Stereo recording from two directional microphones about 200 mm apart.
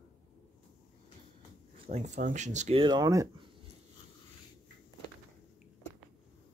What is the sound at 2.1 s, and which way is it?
Speech, 40° right (ahead or behind).